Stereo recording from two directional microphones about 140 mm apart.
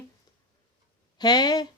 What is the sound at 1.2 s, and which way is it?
Speech, 30° left (ahead or behind).